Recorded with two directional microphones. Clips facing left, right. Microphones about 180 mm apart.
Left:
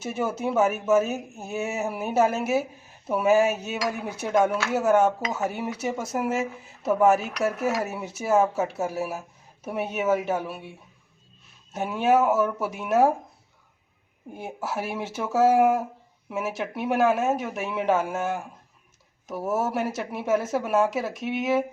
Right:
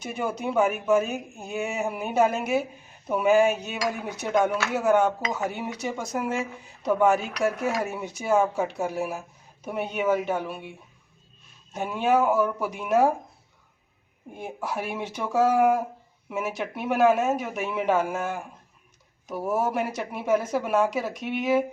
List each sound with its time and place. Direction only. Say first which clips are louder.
0.0 s speech: left 2 dB; 5° left (ahead or behind)
14.3 s speech: even; 5° left (ahead or behind)